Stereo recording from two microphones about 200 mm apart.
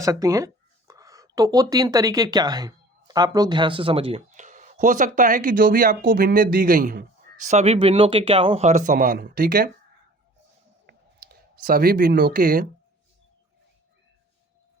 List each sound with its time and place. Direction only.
0.0 s speech: 15° right (ahead or behind); by 7.5 s 45° right (ahead or behind)
7.5 s speech: 30° right (ahead or behind); by 9.6 s 45° right (ahead or behind)
10.8 s clicking: 50° right (ahead or behind)